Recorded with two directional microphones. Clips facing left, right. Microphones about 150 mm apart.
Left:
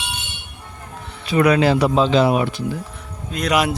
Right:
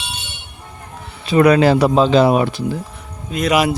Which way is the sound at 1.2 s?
25° right (ahead or behind).